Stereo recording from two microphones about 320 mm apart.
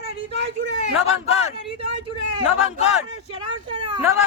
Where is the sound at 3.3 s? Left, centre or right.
Centre.